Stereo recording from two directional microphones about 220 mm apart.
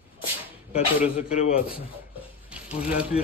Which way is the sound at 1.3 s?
30° left (ahead or behind).